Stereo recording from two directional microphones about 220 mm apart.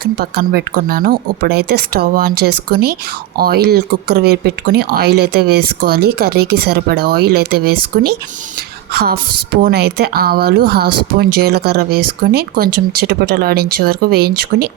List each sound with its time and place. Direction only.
0.0 s a woman's voice: 45° right (ahead or behind)